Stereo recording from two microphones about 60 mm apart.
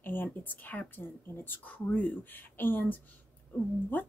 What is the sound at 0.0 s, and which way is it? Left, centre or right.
A woman's voice, left.